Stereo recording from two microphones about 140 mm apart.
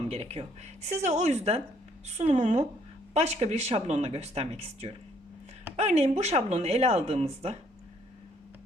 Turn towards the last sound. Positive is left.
turn(degrees=-45)  # may be behind; listen again after turning